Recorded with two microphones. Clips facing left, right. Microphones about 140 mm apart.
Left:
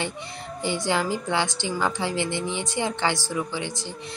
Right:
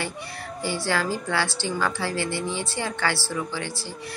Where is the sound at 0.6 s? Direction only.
20° left (ahead or behind).